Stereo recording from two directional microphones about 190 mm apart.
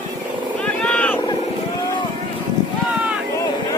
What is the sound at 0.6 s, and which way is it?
Vehicle, 5° left (ahead or behind).